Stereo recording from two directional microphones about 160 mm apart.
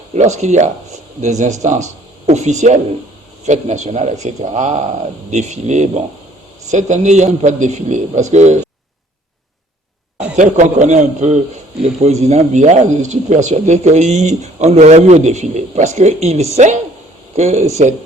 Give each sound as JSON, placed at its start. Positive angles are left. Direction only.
{"t": 0.1, "sound": "speech", "side_deg": -45}
{"t": 10.3, "sound": "speech", "side_deg": -50}